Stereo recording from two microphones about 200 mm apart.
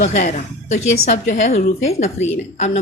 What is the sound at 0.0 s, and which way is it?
A woman's voice, 35° left (ahead or behind).